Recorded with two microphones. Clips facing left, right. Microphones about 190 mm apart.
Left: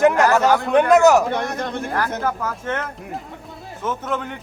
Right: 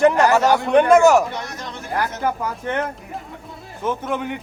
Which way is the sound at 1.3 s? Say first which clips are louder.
Left 7 dB; 55° left (ahead or behind).